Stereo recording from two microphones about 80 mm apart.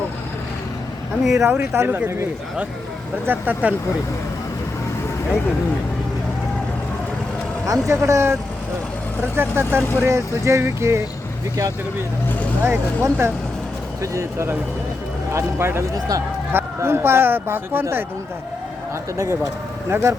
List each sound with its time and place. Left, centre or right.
1.2 s speech: centre
1.7 s speech: right
3.2 s speech: right
7.7 s speech: right
12.6 s speech: right
19.1 s speech: right